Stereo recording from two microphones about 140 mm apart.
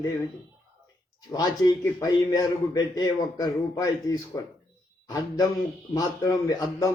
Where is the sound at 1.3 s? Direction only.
25° left (ahead or behind).